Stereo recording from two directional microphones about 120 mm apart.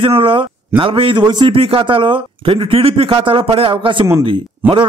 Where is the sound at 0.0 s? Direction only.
45° right (ahead or behind).